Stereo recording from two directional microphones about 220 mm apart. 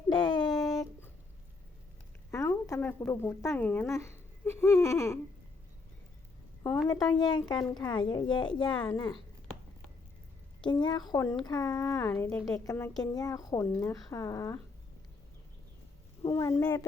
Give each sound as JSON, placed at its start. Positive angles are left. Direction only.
{"t": 0.1, "sound": "a sound", "side_deg": 20}
{"t": 2.3, "sound": "speech", "side_deg": 15}
{"t": 6.8, "sound": "a woman's voice", "side_deg": 15}
{"t": 10.6, "sound": "a woman's voice", "side_deg": 20}
{"t": 16.3, "sound": "a woman's voice", "side_deg": 10}